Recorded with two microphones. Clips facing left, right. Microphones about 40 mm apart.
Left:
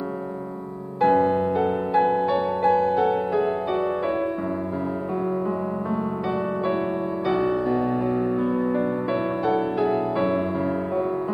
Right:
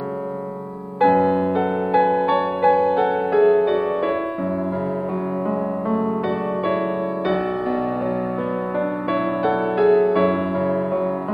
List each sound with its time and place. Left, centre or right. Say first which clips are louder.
1.0 s music: right 3 dB; right
7.2 s music: left 1 dB; right